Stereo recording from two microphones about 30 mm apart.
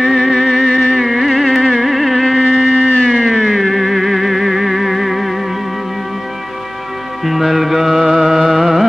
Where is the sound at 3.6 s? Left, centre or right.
Centre.